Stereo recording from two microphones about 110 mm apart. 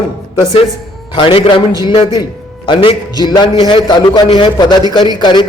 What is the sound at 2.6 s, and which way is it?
A man's voice, 50° left (ahead or behind).